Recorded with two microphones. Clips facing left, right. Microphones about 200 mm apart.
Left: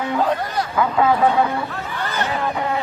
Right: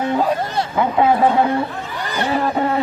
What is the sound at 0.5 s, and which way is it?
Speech, 25° right (ahead or behind).